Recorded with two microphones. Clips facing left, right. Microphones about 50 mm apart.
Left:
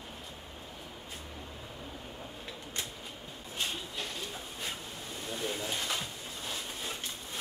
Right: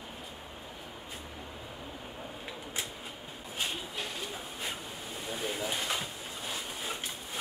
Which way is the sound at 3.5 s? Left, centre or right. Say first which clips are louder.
Right 1 dB; centre.